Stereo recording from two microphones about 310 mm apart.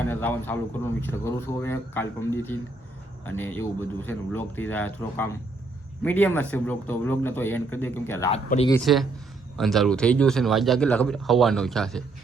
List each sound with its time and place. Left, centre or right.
0.0 s speech: centre
8.3 s speech: centre
8.7 s a man's voice: centre